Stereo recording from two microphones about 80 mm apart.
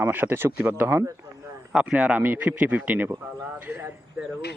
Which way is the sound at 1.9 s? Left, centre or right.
Centre.